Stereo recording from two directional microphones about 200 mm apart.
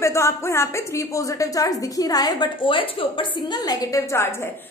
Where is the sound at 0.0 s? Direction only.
15° left (ahead or behind).